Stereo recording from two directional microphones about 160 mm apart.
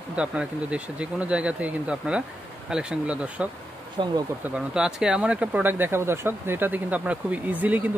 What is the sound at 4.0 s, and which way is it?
Speech, 30° right (ahead or behind).